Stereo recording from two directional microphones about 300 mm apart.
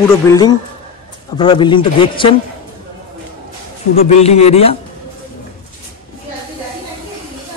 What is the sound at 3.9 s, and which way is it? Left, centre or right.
Speech, left.